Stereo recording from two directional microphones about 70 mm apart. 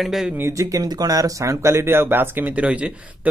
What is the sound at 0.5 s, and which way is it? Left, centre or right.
Speech, right.